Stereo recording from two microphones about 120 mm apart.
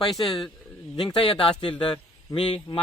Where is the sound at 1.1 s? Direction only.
50° left (ahead or behind).